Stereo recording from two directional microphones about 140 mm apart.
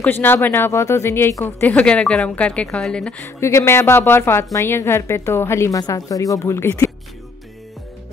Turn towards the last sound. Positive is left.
turn(degrees=20)  # may be behind; listen again after turning